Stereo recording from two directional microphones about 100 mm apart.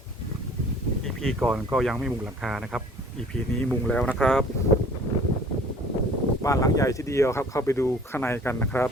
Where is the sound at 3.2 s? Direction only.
10° left (ahead or behind).